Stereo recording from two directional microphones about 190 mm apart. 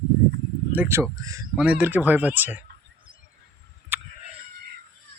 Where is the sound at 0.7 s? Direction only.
10° right (ahead or behind).